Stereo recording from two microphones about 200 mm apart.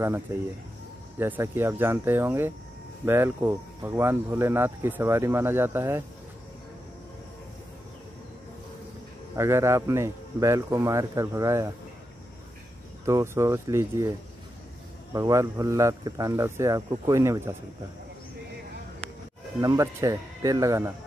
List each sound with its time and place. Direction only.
0.3 s speech: 15° right (ahead or behind)
9.3 s speech: 15° right (ahead or behind)
13.0 s speech: 15° right (ahead or behind)
15.1 s speech: 15° right (ahead or behind)
19.6 s speech: 15° right (ahead or behind)